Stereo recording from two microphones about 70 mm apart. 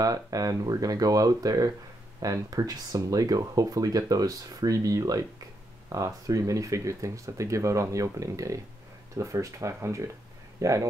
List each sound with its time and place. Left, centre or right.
0.0 s speech: right